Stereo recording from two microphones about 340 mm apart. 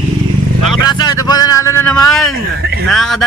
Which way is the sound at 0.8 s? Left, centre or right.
Centre.